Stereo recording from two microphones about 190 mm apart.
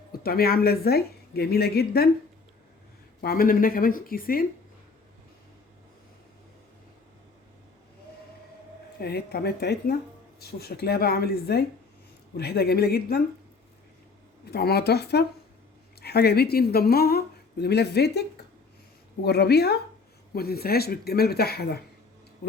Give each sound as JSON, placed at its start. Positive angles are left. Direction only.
{"t": 0.1, "sound": "a woman's voice", "side_deg": 50}
{"t": 3.2, "sound": "speech", "side_deg": 50}
{"t": 9.0, "sound": "a woman's voice", "side_deg": 55}
{"t": 14.5, "sound": "a woman's voice", "side_deg": 55}